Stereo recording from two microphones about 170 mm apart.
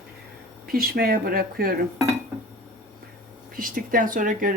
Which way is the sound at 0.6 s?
60° right (ahead or behind).